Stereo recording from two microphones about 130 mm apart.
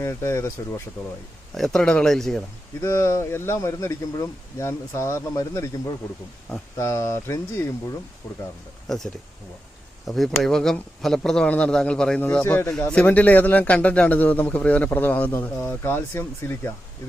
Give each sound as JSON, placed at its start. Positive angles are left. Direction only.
{"t": 0.0, "sound": "speech", "side_deg": 20}
{"t": 1.5, "sound": "a man's voice", "side_deg": 5}
{"t": 2.8, "sound": "speech", "side_deg": 20}
{"t": 6.7, "sound": "a man's voice", "side_deg": 25}
{"t": 10.1, "sound": "a man's voice", "side_deg": 0}